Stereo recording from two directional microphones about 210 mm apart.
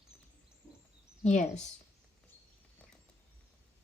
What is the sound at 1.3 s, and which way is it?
Speech, 35° left (ahead or behind).